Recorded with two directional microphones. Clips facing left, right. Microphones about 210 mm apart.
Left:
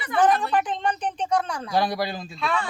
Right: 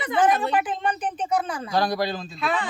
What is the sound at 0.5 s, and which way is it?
Speech, 5° right (ahead or behind).